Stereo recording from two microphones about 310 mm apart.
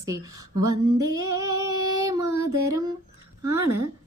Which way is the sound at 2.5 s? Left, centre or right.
Right.